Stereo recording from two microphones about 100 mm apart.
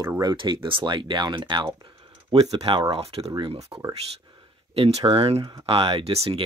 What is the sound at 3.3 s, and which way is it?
Speech, 60° right (ahead or behind).